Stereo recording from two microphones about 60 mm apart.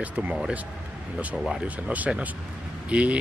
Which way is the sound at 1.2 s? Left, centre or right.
Centre.